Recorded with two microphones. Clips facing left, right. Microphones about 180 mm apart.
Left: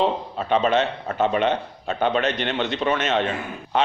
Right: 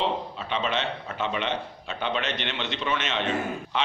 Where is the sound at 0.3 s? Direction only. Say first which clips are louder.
Left 9 dB; 45° left (ahead or behind).